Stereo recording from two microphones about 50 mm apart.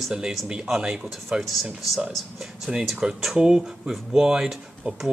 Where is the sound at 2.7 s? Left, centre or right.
Centre.